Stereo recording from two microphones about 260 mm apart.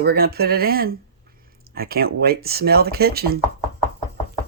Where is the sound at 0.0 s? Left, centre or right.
Right.